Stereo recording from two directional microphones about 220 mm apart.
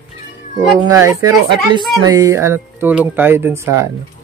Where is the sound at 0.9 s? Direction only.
15° right (ahead or behind).